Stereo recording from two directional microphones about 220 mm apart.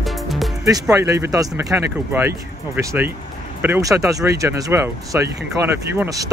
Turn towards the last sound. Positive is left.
turn(degrees=-10)  # may be behind; listen again after turning